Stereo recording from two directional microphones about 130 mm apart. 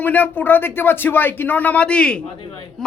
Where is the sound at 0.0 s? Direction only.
15° left (ahead or behind).